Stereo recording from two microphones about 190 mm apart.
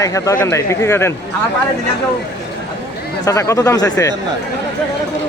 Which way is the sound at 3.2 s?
15° left (ahead or behind).